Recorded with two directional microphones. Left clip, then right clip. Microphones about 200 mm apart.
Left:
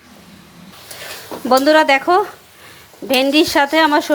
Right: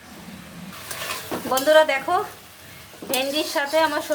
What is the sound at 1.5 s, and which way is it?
Speech, 40° left (ahead or behind).